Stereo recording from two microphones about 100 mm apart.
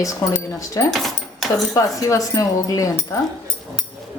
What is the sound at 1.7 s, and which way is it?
A woman's voice, 35° left (ahead or behind).